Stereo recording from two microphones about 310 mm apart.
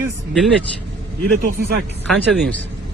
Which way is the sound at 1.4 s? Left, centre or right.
Right.